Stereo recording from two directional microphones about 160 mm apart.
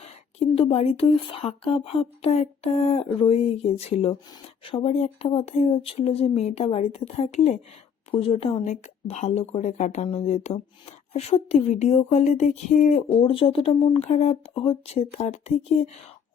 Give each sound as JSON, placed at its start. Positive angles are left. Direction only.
{"t": 0.0, "sound": "speech", "side_deg": 40}